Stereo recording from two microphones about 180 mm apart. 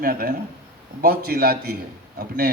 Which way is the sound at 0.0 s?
55° right (ahead or behind).